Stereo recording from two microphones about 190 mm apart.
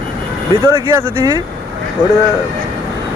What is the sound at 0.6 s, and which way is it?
Speech, 15° right (ahead or behind).